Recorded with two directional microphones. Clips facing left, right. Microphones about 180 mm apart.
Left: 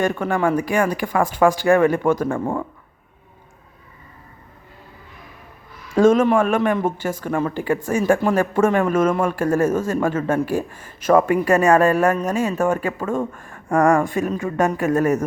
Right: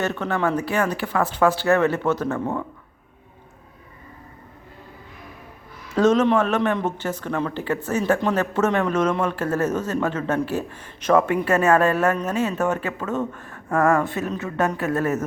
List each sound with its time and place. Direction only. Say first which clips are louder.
0.0 s speech: left 3 dB; 10° left (ahead or behind)
5.9 s speech: left 3 dB; 10° left (ahead or behind)